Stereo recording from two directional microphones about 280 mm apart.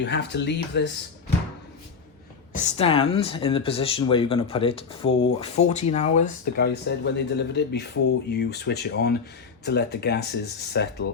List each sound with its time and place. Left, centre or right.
0.0 s speech: left
2.5 s speech: left